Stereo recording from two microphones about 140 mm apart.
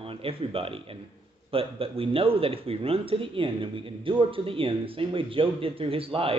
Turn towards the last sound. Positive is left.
turn(degrees=-40)  # may be behind; listen again after turning